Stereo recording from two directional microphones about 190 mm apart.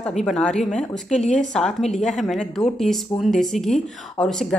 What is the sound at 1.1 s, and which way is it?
Speech, 35° left (ahead or behind).